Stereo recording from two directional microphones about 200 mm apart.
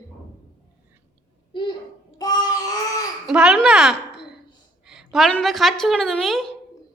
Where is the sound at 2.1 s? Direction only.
20° left (ahead or behind).